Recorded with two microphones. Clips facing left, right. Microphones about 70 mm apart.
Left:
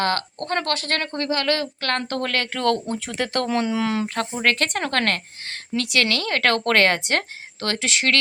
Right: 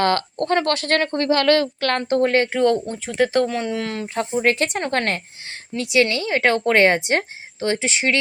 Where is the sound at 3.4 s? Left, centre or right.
Centre.